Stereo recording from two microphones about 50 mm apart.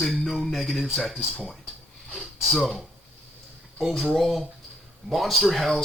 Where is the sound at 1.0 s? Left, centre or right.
Left.